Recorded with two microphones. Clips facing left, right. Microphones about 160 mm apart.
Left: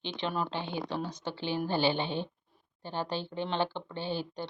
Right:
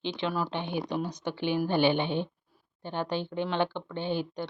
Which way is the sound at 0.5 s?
15° right (ahead or behind).